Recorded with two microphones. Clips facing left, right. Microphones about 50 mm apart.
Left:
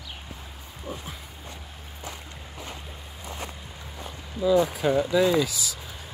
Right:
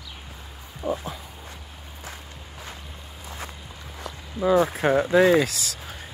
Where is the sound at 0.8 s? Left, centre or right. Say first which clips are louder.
Right 9 dB; centre.